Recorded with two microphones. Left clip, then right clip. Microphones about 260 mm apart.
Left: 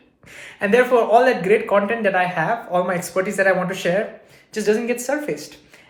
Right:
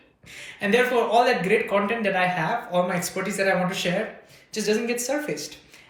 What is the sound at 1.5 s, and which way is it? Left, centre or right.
Speech, left.